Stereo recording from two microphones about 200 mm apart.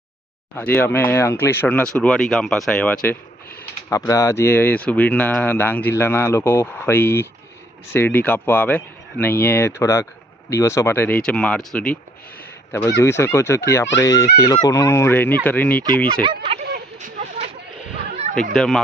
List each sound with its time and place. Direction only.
0.5 s speech: 10° left (ahead or behind)
3.8 s speech: 15° left (ahead or behind)
12.4 s honk: 15° left (ahead or behind)
13.0 s speech: 10° left (ahead or behind)
16.2 s speech: 25° right (ahead or behind)
18.5 s speech: centre (ahead or behind)